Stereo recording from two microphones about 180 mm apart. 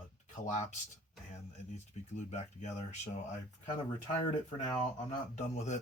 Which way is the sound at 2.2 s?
40° left (ahead or behind).